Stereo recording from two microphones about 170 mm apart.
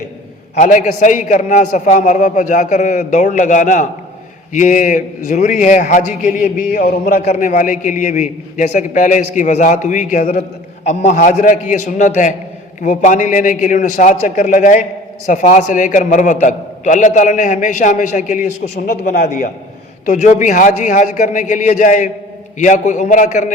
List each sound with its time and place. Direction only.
0.5 s a man's voice: 45° left (ahead or behind)